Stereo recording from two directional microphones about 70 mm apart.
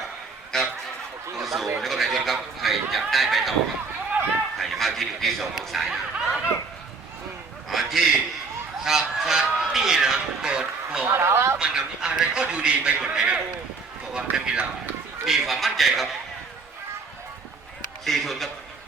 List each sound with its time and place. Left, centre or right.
0.5 s speech: centre
4.5 s speech: centre
7.7 s a man's voice: centre
11.1 s speech: right
11.5 s a man's voice: centre
15.2 s speech: centre
18.0 s speech: centre